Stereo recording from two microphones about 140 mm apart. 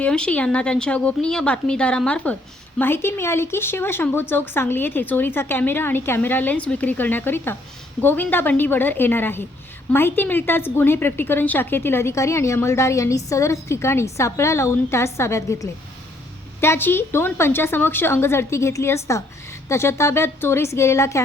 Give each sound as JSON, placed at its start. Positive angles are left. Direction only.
{"t": 0.0, "sound": "a woman's voice", "side_deg": 5}